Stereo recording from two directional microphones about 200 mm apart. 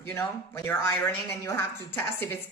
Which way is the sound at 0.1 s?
15° left (ahead or behind).